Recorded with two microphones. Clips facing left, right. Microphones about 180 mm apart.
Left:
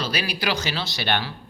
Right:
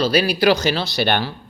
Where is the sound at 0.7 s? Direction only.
50° right (ahead or behind).